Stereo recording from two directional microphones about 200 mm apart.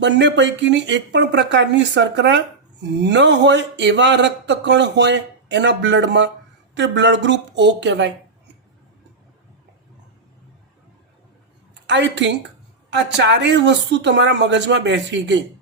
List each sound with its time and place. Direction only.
0.0 s speech: 60° right (ahead or behind)
11.7 s a sound: 65° right (ahead or behind)
12.9 s speech: 60° right (ahead or behind)